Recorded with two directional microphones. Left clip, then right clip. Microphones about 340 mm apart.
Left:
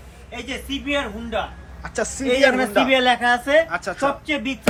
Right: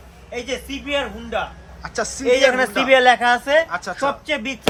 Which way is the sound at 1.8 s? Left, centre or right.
Centre.